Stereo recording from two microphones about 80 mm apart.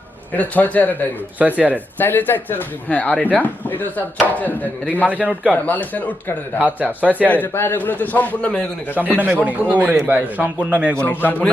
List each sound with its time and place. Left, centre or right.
0.3 s a man's voice: centre
1.4 s a man's voice: centre
2.0 s a man's voice: left
6.6 s a man's voice: centre
7.3 s a man's voice: left
9.1 s a man's voice: right
11.0 s a man's voice: left